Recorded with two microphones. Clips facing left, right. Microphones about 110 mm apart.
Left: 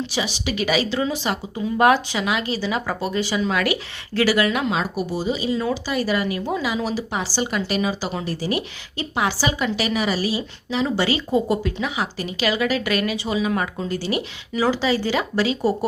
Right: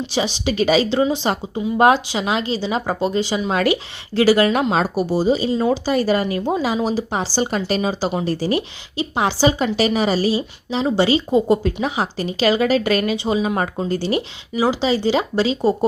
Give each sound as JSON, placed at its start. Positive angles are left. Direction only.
{"t": 0.1, "sound": "speech", "side_deg": -30}
{"t": 14.5, "sound": "speech", "side_deg": -15}